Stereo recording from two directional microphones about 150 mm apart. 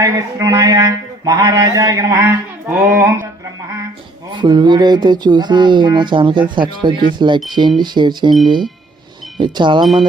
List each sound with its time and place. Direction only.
0.0 s a sound: 20° right (ahead or behind)
4.3 s speech: 30° right (ahead or behind)
9.4 s speech: 30° right (ahead or behind)
9.8 s speech: centre (ahead or behind)